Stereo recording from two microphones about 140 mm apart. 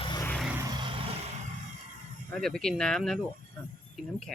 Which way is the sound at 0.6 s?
30° right (ahead or behind).